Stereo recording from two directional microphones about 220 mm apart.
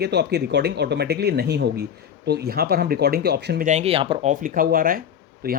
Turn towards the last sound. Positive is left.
turn(degrees=-45)  # may be behind; listen again after turning